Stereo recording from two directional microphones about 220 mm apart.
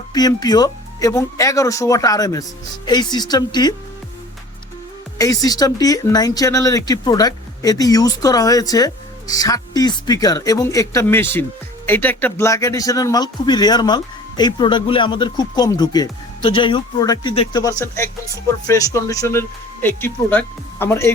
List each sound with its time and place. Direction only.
0.1 s speech: 20° left (ahead or behind)
5.1 s speech: 15° left (ahead or behind)